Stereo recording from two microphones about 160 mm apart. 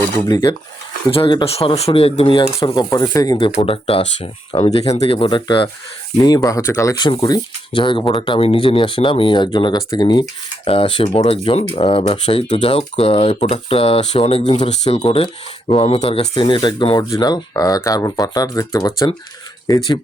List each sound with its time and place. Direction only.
0.3 s speech: 25° left (ahead or behind)
3.3 s speech: 35° left (ahead or behind)